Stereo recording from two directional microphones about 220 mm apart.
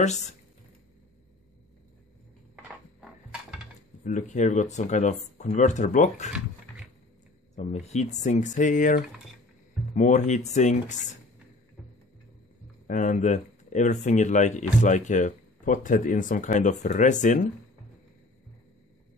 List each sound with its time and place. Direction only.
0.0 s speech: 30° left (ahead or behind)
2.5 s a sound: 5° right (ahead or behind)
4.0 s speech: 35° left (ahead or behind)
7.5 s speech: 30° left (ahead or behind)
12.8 s speech: 35° left (ahead or behind)